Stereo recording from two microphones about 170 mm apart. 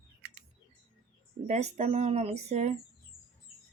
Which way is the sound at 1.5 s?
40° right (ahead or behind).